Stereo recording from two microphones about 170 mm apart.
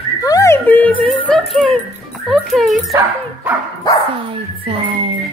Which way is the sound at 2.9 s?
15° right (ahead or behind).